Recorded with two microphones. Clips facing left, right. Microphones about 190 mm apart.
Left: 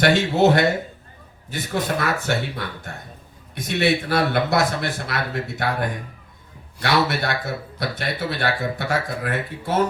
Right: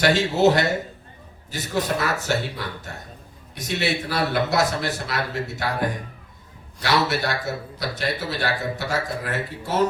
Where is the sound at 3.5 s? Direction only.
55° left (ahead or behind).